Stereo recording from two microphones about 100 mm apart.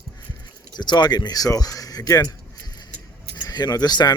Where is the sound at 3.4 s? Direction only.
40° left (ahead or behind).